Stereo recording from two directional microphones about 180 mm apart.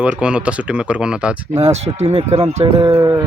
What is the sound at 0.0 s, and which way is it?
Speech, 5° right (ahead or behind).